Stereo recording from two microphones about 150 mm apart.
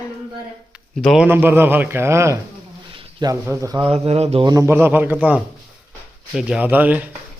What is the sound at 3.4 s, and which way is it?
Speech, 20° right (ahead or behind).